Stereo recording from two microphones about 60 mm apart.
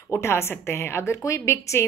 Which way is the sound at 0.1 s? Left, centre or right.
Left.